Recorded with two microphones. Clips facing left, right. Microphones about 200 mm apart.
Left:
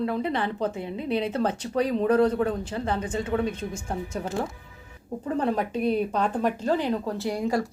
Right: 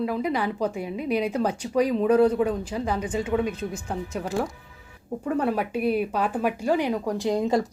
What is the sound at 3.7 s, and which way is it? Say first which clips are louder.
Speech: right 1 dB; 10° left (ahead or behind).